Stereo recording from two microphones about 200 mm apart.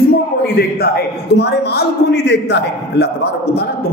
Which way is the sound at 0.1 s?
50° left (ahead or behind).